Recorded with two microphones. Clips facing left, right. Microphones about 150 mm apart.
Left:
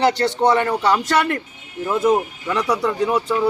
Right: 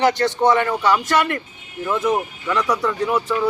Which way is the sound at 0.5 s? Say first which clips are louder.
Even; 35° left (ahead or behind).